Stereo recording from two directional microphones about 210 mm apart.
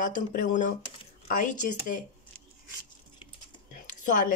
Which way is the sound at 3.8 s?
40° left (ahead or behind).